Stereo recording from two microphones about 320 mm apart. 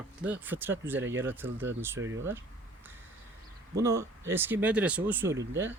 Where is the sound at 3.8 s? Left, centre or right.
Centre.